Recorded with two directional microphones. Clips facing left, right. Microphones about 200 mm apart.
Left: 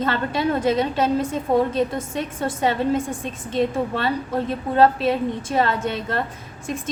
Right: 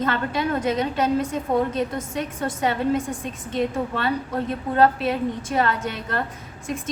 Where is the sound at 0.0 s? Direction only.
30° left (ahead or behind).